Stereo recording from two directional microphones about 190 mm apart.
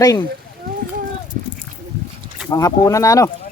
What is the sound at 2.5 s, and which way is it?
Speech, 20° left (ahead or behind).